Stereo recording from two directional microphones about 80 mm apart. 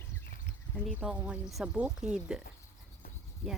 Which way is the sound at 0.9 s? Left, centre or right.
Centre.